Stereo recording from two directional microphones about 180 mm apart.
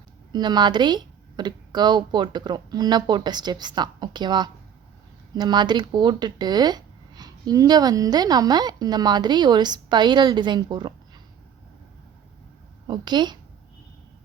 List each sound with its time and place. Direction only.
0.3 s speech: 25° right (ahead or behind)
12.9 s speech: 25° right (ahead or behind)